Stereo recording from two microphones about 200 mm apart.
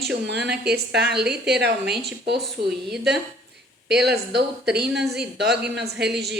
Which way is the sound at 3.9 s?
55° right (ahead or behind).